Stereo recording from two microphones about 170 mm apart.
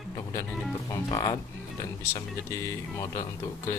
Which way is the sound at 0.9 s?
20° left (ahead or behind).